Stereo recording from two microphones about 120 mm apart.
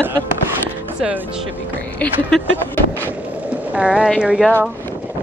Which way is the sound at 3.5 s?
10° right (ahead or behind).